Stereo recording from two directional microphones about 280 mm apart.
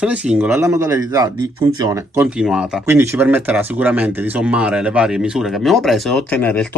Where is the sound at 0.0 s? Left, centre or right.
Centre.